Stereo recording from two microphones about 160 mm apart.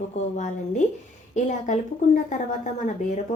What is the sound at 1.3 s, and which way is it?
Speech, 50° left (ahead or behind).